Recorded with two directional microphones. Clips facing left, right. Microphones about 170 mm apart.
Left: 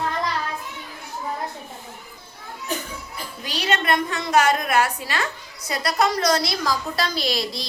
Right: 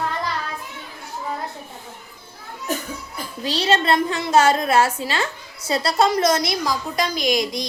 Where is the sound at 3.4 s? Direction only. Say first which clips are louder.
Right 4 dB; 30° right (ahead or behind).